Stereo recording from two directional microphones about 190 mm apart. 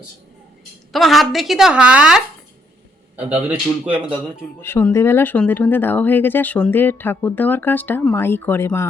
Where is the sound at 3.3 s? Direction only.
10° right (ahead or behind).